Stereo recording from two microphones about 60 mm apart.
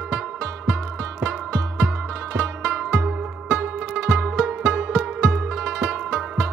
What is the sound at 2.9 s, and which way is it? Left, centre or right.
Zither, right.